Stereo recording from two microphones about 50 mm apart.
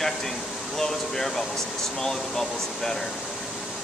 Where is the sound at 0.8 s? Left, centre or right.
Centre.